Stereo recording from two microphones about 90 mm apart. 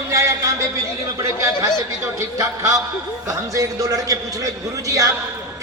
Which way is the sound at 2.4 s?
35° right (ahead or behind).